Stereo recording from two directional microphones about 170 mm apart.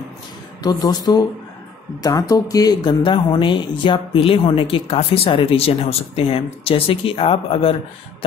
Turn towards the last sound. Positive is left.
turn(degrees=35)  # may be behind; listen again after turning